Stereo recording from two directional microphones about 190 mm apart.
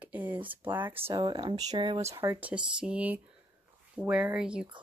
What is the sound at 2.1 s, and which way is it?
Speech, 10° right (ahead or behind).